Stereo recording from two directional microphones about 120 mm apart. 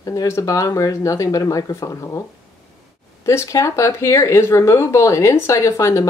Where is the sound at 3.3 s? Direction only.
25° left (ahead or behind).